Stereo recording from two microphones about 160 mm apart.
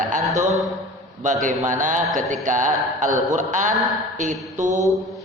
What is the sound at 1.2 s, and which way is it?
A man's voice, 50° right (ahead or behind).